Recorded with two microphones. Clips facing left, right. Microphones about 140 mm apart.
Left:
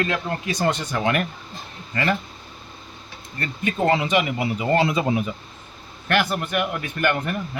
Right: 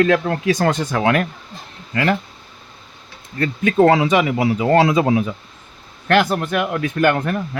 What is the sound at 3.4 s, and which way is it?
Speech, 90° right.